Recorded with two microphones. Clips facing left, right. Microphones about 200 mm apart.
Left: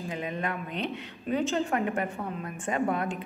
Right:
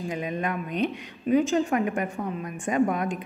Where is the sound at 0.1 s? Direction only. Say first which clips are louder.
Right 3 dB; 15° right (ahead or behind).